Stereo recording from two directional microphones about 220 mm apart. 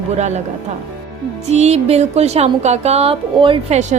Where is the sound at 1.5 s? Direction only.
30° right (ahead or behind).